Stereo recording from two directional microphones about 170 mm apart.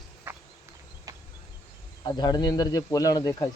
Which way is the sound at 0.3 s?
10° right (ahead or behind).